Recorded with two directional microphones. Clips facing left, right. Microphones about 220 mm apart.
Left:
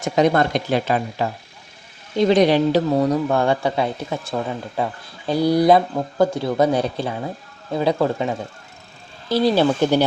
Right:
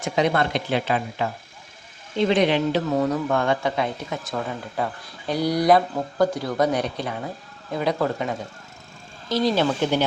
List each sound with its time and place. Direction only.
0.0 s speech: 45° left (ahead or behind)